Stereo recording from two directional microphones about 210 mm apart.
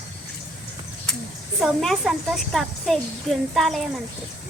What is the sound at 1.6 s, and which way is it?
A woman's voice, centre (ahead or behind).